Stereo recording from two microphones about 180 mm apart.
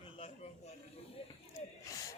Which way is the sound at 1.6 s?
40° left (ahead or behind).